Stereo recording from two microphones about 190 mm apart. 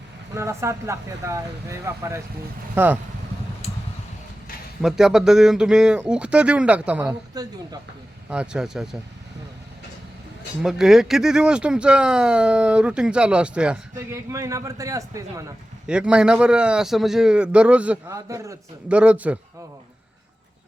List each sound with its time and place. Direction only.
0.3 s speech: 15° right (ahead or behind)
4.8 s speech: 5° right (ahead or behind)
8.3 s speech: 5° right (ahead or behind)
10.6 s speech: 5° right (ahead or behind)
14.3 s speech: 15° right (ahead or behind)
15.9 s speech: 5° right (ahead or behind)
18.1 s speech: 15° right (ahead or behind)